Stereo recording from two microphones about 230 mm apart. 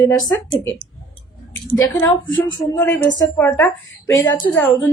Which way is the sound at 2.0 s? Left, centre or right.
Centre.